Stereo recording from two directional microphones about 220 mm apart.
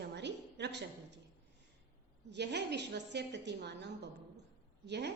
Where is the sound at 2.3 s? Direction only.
50° right (ahead or behind).